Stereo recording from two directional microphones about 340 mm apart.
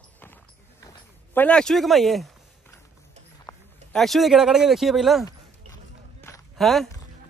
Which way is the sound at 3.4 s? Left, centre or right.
Centre.